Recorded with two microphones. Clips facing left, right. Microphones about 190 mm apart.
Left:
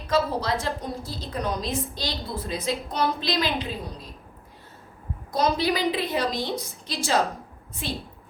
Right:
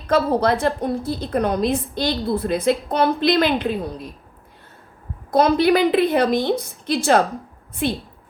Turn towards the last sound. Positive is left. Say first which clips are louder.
# right 10 dB
turn(degrees=-60)  # may be behind; listen again after turning